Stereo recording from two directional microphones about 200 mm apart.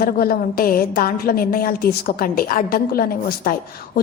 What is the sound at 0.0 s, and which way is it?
A woman's voice, 45° left (ahead or behind).